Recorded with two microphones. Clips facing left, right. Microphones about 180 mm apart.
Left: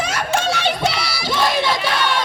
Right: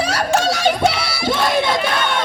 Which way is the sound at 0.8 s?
55° right (ahead or behind).